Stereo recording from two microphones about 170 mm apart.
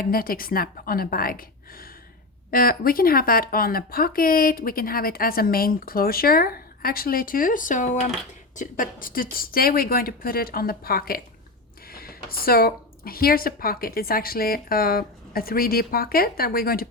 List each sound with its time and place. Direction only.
0.0 s speech: 60° left (ahead or behind)